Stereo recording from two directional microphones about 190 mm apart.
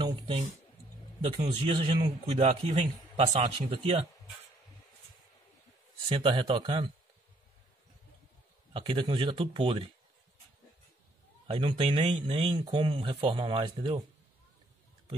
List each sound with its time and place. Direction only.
0.0 s music: 30° right (ahead or behind)
1.4 s a man's voice: 25° right (ahead or behind)
6.0 s a man's voice: 25° right (ahead or behind)
8.7 s a man's voice: 25° right (ahead or behind)
11.4 s a man's voice: 30° right (ahead or behind)